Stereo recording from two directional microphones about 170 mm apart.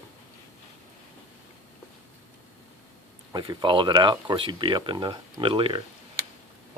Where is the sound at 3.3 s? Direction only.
25° right (ahead or behind).